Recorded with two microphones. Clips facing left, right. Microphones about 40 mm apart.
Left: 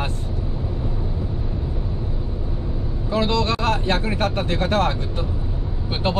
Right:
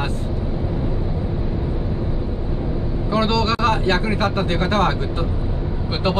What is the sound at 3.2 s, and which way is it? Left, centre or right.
Speech, right.